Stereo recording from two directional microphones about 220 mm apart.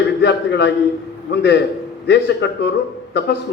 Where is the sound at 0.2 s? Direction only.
50° left (ahead or behind).